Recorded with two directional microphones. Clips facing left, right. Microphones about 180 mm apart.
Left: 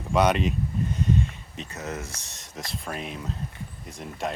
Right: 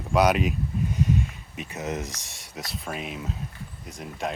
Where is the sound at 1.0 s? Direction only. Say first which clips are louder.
Left 1 dB; 5° right (ahead or behind).